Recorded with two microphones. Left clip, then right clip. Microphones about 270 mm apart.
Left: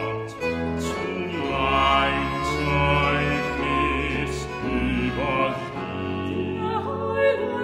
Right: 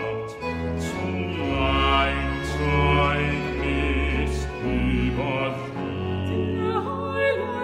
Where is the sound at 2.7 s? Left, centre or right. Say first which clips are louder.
Right 1 dB; centre.